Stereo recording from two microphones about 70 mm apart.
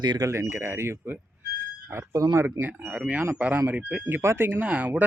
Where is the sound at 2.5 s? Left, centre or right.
Right.